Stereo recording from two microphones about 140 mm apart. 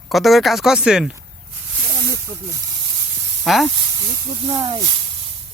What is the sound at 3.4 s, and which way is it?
Speech, centre (ahead or behind).